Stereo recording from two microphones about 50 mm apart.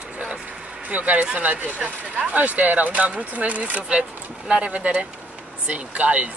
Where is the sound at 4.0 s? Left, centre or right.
Centre.